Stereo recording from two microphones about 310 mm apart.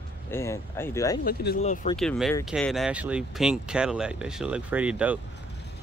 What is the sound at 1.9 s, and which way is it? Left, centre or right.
Speech, centre.